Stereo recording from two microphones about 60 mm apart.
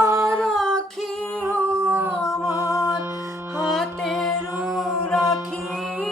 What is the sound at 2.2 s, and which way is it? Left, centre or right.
Music, left.